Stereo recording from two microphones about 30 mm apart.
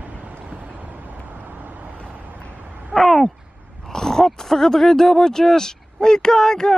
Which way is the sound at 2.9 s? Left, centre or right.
Centre.